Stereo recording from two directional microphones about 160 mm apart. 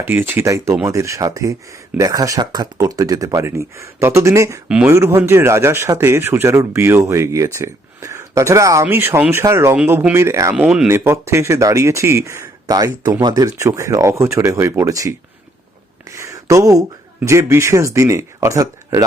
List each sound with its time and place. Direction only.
0.0 s speech: 15° right (ahead or behind)
10.5 s speech: 5° right (ahead or behind)
16.0 s a sound: 20° right (ahead or behind)
17.2 s speech: 15° right (ahead or behind)